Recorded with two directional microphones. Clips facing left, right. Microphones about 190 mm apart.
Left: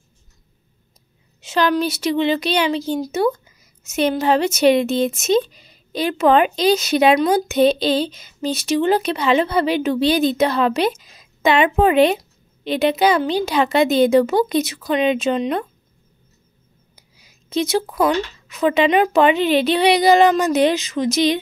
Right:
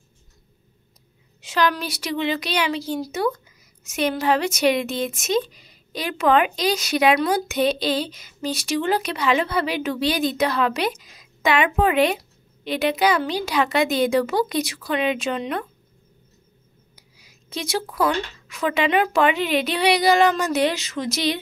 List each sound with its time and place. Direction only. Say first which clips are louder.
1.4 s a woman's voice: left 4 dB; 25° left (ahead or behind)
16.9 s a woman's voice: right 1 dB; 25° left (ahead or behind)